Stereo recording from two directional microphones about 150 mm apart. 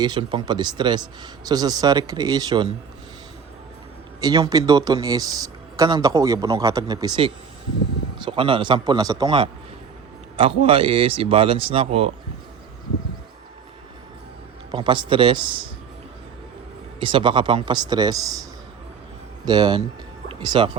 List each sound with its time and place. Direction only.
0.0 s speech: 30° right (ahead or behind)
4.2 s speech: 25° right (ahead or behind); by 12.1 s 40° right (ahead or behind)
14.7 s speech: 30° right (ahead or behind)
17.0 s speech: 35° right (ahead or behind)
19.5 s speech: 30° right (ahead or behind)
20.2 s music: 30° right (ahead or behind)